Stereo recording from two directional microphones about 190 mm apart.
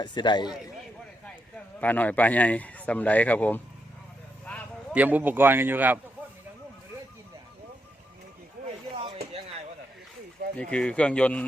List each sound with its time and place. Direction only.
0.0 s a man's voice: 25° left (ahead or behind)
1.8 s a man's voice: 10° left (ahead or behind)
4.9 s speech: 10° right (ahead or behind)
10.6 s speech: 5° left (ahead or behind)